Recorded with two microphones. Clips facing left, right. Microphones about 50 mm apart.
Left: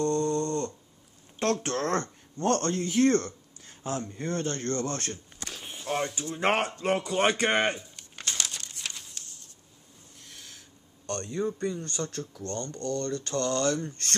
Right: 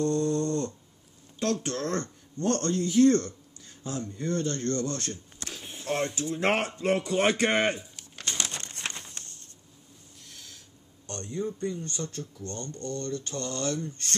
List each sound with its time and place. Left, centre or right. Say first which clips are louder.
0.0 s snoring: even; centre
1.4 s a man's voice: left 2 dB; left
5.4 s a sound: even; centre
6.3 s speech: left 1 dB; centre
6.8 s speech: right 1 dB; centre
7.2 s pigeon: left 1 dB; centre
8.5 s crumpling: right 3 dB; right
11.1 s speech: left 3 dB; left
12.7 s speech: left 2 dB; left